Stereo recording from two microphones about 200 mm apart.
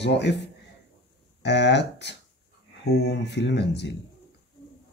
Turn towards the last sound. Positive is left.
turn(degrees=60)  # may be behind; listen again after turning